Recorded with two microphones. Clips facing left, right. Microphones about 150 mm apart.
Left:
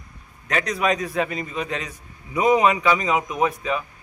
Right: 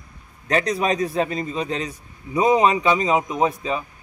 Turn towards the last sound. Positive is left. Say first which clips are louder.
# right 1 dB
turn(degrees=-30)  # may be behind; listen again after turning